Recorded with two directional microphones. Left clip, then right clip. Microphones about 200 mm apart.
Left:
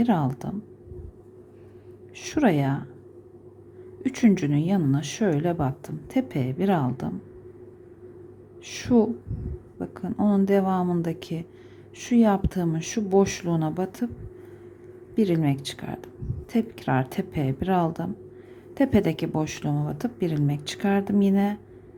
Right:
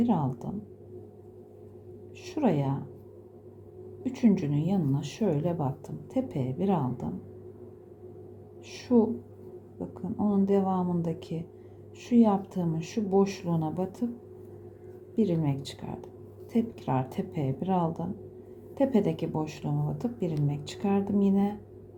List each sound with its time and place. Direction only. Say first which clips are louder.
0.0 s a woman's voice: left 4 dB; 20° left (ahead or behind)
2.1 s a woman's voice: left 5 dB; 25° left (ahead or behind)
4.0 s a woman's voice: left 4 dB; 25° left (ahead or behind)
8.6 s a woman's voice: left 3 dB; 25° left (ahead or behind)
15.1 s a woman's voice: left 5 dB; 20° left (ahead or behind)